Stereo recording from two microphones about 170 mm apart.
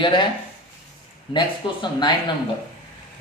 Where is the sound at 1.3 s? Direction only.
30° left (ahead or behind).